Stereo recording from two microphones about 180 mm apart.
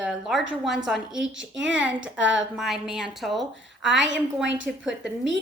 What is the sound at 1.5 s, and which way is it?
Speech, 90° right.